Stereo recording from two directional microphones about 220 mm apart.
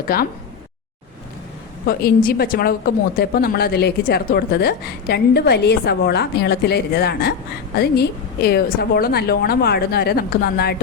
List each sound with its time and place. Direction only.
0.1 s a woman's voice: 45° left (ahead or behind)
1.9 s a woman's voice: 45° left (ahead or behind)